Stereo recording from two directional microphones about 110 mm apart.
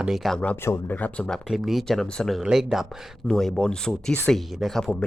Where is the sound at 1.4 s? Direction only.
Centre (ahead or behind).